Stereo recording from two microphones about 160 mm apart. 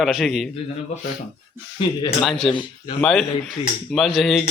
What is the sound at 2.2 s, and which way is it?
Speech, 5° left (ahead or behind).